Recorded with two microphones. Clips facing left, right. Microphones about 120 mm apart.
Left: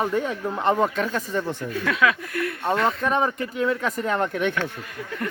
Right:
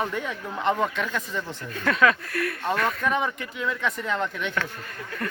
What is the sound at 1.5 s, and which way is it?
Speech, 10° left (ahead or behind).